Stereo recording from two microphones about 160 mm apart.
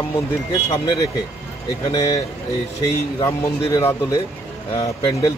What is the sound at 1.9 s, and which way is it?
Speech, 25° left (ahead or behind).